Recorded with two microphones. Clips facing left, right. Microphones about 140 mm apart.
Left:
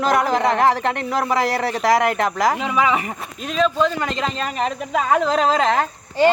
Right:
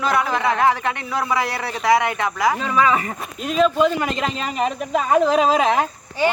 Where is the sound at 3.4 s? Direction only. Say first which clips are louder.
Right 2 dB; 5° right (ahead or behind).